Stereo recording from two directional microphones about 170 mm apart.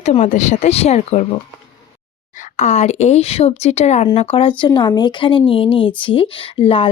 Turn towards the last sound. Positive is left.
turn(degrees=30)  # may be behind; listen again after turning